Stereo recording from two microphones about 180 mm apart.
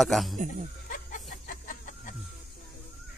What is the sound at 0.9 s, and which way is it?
Music, 45° left (ahead or behind).